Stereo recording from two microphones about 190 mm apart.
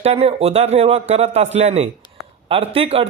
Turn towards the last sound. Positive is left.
turn(degrees=-30)  # may be behind; listen again after turning